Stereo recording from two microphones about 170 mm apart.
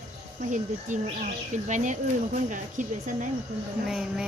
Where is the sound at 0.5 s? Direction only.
45° right (ahead or behind).